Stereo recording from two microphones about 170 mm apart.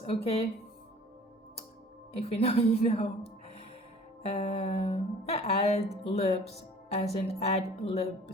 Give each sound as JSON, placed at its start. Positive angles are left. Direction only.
{"t": 0.0, "sound": "speech", "side_deg": 35}
{"t": 2.1, "sound": "speech", "side_deg": 35}
{"t": 4.2, "sound": "speech", "side_deg": 40}